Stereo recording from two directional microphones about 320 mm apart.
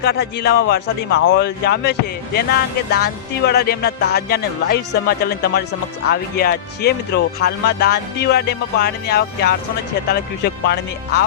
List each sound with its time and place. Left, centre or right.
0.0 s speech: left
2.9 s music: left
6.1 s speech: left